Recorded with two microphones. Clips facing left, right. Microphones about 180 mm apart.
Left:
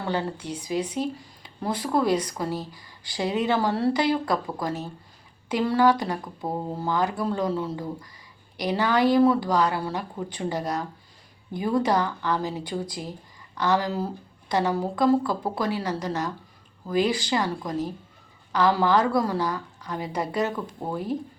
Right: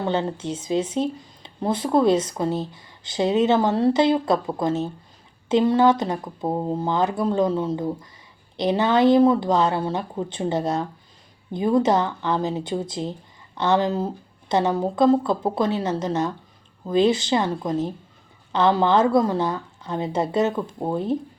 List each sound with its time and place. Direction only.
0.0 s speech: 20° right (ahead or behind)